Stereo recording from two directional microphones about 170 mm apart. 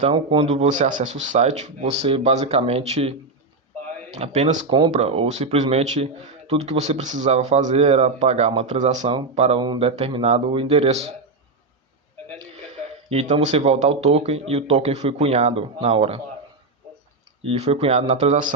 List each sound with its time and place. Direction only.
0.1 s speech: 30° right (ahead or behind)
13.1 s speech: 35° right (ahead or behind)
17.4 s speech: 35° right (ahead or behind)